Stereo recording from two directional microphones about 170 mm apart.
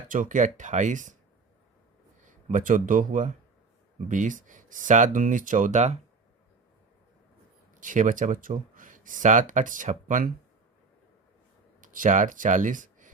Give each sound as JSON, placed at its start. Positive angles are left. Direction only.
{"t": 0.1, "sound": "speech", "side_deg": -50}
{"t": 2.2, "sound": "speech", "side_deg": -50}
{"t": 7.8, "sound": "speech", "side_deg": -50}
{"t": 11.8, "sound": "speech", "side_deg": -50}